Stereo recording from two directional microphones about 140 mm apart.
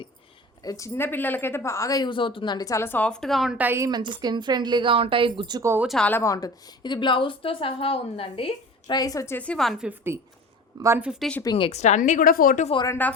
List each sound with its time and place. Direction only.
0.6 s speech: 25° left (ahead or behind); by 3.8 s 15° right (ahead or behind)
3.8 s a woman's voice: 30° right (ahead or behind)
5.6 s speech: 15° right (ahead or behind)
5.9 s a woman's voice: 10° left (ahead or behind); by 9.0 s 40° left (ahead or behind)
9.0 s speech: 25° left (ahead or behind); by 9.9 s centre (ahead or behind)
10.8 s a woman's voice: 20° right (ahead or behind)
11.0 s speech: 5° right (ahead or behind)
11.5 s a woman's voice: 40° left (ahead or behind)
11.8 s a woman's voice: 55° left (ahead or behind); by 12.6 s 90° left
12.9 s speech: 10° left (ahead or behind)